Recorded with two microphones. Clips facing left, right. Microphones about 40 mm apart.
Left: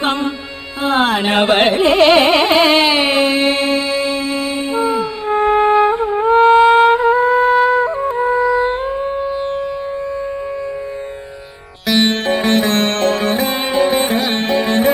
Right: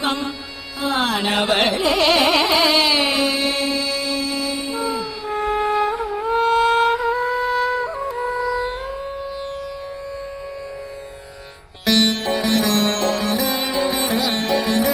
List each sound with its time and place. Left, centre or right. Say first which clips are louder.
0.0 s music: left 5 dB; left
0.8 s carnatic music: left 6 dB; left
11.9 s music: left 2 dB; centre
12.2 s music: left 5 dB; left